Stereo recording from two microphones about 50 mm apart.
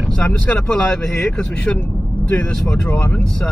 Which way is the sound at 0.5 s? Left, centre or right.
Left.